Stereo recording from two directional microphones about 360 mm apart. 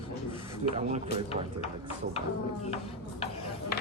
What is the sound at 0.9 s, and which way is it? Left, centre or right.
Speech, centre.